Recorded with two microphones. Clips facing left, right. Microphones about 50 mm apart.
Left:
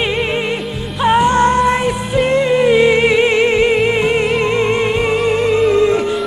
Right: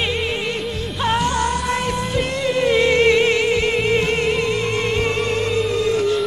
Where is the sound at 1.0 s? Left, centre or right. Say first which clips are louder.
Left 8 dB; centre.